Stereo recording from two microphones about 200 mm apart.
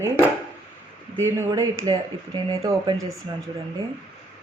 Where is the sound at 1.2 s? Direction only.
15° right (ahead or behind).